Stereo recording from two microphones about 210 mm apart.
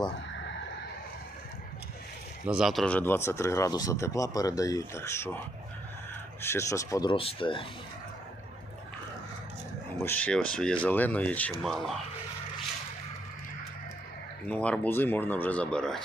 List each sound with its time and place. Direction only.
2.5 s speech: centre (ahead or behind)
6.4 s speech: 10° left (ahead or behind)
10.0 s speech: 10° left (ahead or behind)
14.4 s speech: 5° left (ahead or behind)